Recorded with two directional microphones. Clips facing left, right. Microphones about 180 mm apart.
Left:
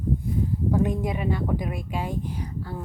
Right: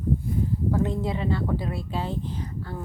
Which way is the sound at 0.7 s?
15° left (ahead or behind).